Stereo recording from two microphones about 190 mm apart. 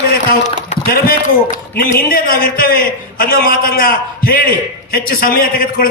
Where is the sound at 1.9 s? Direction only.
50° left (ahead or behind).